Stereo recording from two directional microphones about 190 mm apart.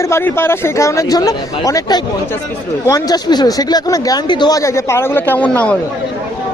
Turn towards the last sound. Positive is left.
turn(degrees=10)  # may be behind; listen again after turning